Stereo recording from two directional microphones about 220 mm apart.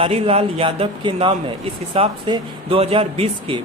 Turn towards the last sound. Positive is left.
turn(degrees=-25)  # may be behind; listen again after turning